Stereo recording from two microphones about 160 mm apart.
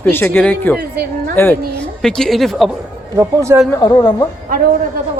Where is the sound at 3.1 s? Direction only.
20° right (ahead or behind).